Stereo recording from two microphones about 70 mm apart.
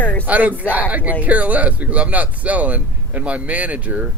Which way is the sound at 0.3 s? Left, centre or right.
Right.